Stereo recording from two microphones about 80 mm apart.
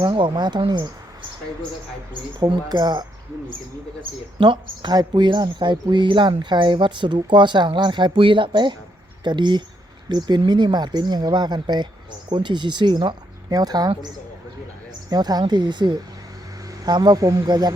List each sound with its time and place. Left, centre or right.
0.0 s speech: right
2.4 s speech: right
4.4 s speech: right
4.9 s speech: right
12.3 s speech: right
15.1 s speech: right